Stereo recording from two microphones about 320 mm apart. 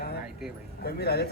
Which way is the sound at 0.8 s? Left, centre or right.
Left.